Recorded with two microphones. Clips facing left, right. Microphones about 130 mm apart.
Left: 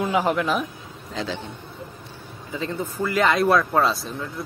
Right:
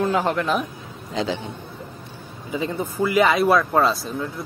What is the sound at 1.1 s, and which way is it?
Speech, 15° right (ahead or behind).